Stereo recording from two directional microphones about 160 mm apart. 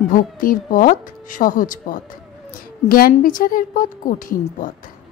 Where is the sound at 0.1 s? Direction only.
60° left (ahead or behind).